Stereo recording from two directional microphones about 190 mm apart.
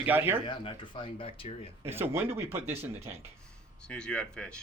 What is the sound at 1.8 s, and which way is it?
Speech, 10° right (ahead or behind).